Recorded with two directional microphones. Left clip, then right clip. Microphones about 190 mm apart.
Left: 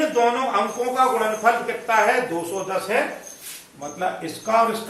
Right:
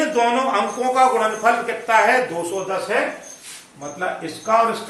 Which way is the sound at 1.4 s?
15° right (ahead or behind).